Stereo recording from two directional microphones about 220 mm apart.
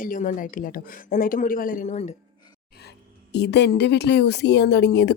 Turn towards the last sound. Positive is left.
turn(degrees=50)  # may be behind; listen again after turning